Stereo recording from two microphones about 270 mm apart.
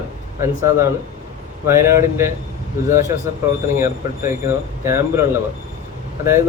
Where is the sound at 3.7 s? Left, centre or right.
Centre.